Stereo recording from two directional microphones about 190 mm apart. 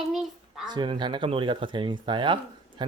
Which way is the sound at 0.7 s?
25° right (ahead or behind).